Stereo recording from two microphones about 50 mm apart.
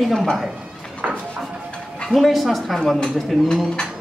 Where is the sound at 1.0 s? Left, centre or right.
Right.